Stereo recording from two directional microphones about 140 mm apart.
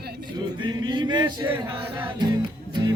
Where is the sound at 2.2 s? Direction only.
30° right (ahead or behind).